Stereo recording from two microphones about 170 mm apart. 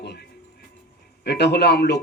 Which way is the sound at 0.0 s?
80° left.